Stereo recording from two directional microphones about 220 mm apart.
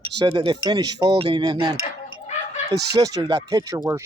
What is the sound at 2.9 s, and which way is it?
Speech, 15° right (ahead or behind).